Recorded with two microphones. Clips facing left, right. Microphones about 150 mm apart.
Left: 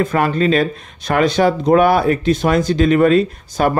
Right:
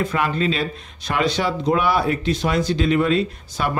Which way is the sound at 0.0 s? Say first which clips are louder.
Left 5 dB; 50° left (ahead or behind).